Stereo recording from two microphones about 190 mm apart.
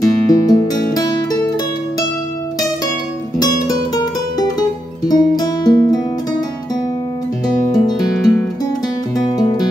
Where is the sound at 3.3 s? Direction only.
20° left (ahead or behind).